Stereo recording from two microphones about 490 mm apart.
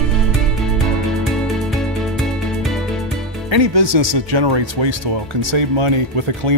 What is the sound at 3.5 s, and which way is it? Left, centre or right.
Speech, right.